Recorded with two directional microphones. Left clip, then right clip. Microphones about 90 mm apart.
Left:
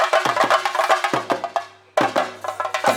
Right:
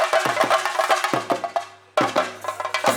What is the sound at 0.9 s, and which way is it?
Music, 5° right (ahead or behind).